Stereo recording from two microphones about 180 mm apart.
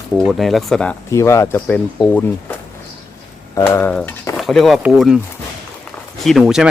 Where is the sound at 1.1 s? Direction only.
15° left (ahead or behind).